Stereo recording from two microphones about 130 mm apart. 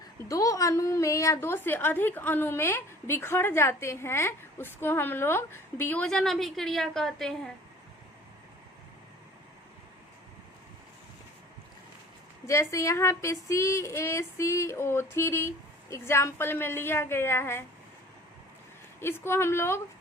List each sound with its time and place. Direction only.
0.3 s a woman's voice: 25° left (ahead or behind); by 7.5 s 5° left (ahead or behind)
12.5 s speech: 25° left (ahead or behind)
18.9 s speech: 20° left (ahead or behind)